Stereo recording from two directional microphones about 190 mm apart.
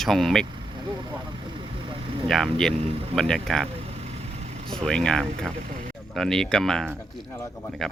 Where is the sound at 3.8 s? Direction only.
35° right (ahead or behind).